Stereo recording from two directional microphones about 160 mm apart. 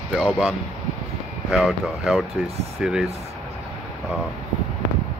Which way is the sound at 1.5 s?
5° right (ahead or behind).